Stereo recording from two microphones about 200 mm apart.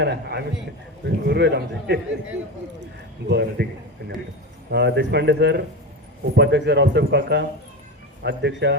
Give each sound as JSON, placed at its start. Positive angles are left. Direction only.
{"t": 0.0, "sound": "a man's voice", "side_deg": -55}
{"t": 4.7, "sound": "speech", "side_deg": -55}